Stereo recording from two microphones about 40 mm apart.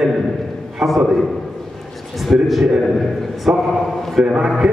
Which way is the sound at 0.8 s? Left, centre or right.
Centre.